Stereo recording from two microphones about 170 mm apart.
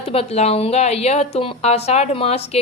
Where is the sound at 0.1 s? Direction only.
35° left (ahead or behind).